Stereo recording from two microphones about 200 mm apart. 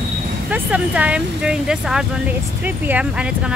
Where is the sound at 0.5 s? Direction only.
5° right (ahead or behind).